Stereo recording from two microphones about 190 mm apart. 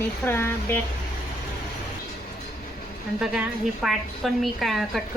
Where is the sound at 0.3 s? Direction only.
10° left (ahead or behind).